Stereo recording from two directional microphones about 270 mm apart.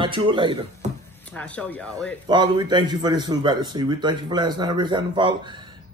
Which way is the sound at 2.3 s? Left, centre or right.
Centre.